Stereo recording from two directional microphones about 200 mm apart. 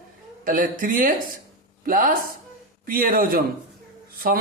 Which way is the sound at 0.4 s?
45° right (ahead or behind).